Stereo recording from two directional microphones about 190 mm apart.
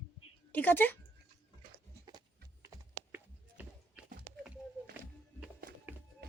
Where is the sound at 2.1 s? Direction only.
20° right (ahead or behind).